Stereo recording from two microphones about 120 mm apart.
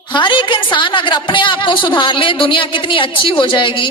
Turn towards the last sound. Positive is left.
turn(degrees=45)  # may be behind; listen again after turning